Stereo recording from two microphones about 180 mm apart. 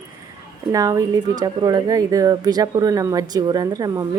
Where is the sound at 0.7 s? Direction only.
20° right (ahead or behind).